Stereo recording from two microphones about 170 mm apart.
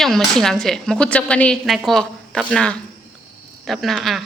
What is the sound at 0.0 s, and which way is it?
A woman's voice, centre (ahead or behind).